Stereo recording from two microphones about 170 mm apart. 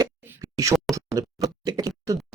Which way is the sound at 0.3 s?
20° right (ahead or behind).